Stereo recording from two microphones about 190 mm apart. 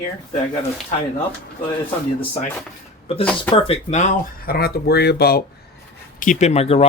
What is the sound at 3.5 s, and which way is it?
Speech, 35° left (ahead or behind).